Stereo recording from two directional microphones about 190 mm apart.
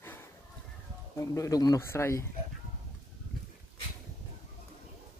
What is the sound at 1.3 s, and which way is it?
Speech, 20° left (ahead or behind).